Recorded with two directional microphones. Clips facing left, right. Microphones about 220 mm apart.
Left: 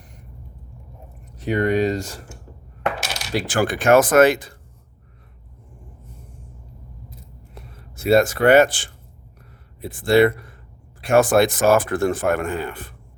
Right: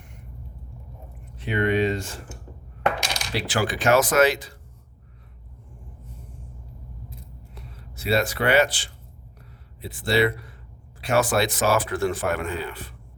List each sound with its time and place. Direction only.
1.4 s speech: 40° left (ahead or behind)
3.3 s speech: 50° left (ahead or behind)
7.5 s speech: 50° left (ahead or behind)